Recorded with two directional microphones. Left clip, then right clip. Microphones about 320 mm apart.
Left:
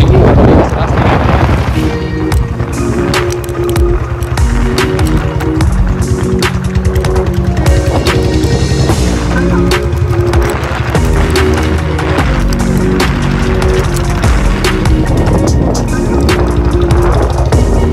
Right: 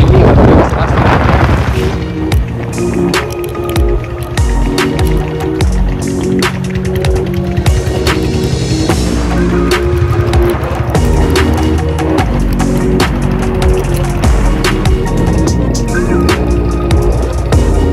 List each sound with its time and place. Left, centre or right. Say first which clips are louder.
0.0 s wind noise: even; centre